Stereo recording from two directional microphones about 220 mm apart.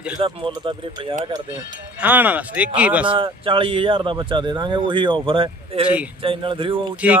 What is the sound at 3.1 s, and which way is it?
Speech, 25° right (ahead or behind).